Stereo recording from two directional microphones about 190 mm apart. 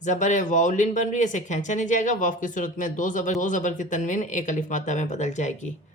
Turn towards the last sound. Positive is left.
turn(degrees=40)  # may be behind; listen again after turning